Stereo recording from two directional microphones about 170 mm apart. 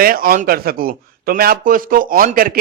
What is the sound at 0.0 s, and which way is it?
Speech, 60° right (ahead or behind).